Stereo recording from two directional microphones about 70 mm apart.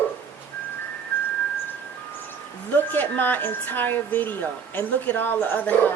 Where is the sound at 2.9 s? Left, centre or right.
Left.